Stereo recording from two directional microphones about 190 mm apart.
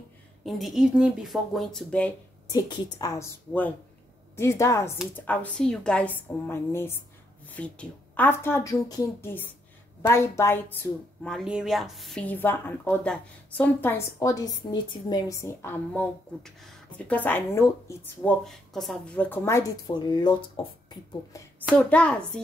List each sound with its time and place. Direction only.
0.5 s speech: centre (ahead or behind)
2.5 s a woman's voice: 20° left (ahead or behind)
21.7 s speech: 5° left (ahead or behind)